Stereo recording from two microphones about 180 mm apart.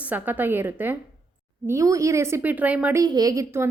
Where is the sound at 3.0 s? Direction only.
20° right (ahead or behind).